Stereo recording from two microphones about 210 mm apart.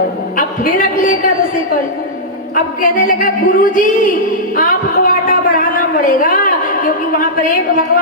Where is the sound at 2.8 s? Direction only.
40° left (ahead or behind).